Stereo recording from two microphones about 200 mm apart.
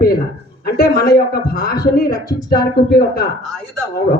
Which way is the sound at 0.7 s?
50° left (ahead or behind).